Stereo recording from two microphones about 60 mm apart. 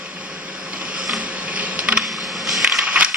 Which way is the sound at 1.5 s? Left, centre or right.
Right.